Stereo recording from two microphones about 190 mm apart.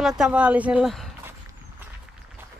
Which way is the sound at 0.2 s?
5° right (ahead or behind).